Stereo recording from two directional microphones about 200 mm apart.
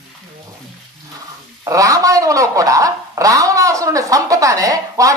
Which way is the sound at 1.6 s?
15° right (ahead or behind).